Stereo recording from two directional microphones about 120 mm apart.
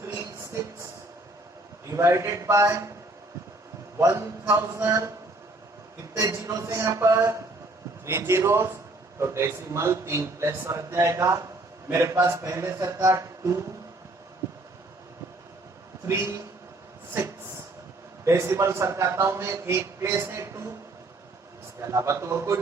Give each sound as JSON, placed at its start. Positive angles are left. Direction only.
{"t": 0.0, "sound": "music", "side_deg": -25}
{"t": 1.9, "sound": "a man's voice", "side_deg": -25}
{"t": 3.9, "sound": "a man's voice", "side_deg": -20}
{"t": 6.1, "sound": "a man's voice", "side_deg": -25}
{"t": 16.0, "sound": "a man's voice", "side_deg": -30}
{"t": 18.3, "sound": "a man's voice", "side_deg": -25}
{"t": 21.8, "sound": "a man's voice", "side_deg": -25}